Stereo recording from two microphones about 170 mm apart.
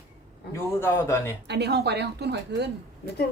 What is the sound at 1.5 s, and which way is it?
A woman's voice, 75° right (ahead or behind).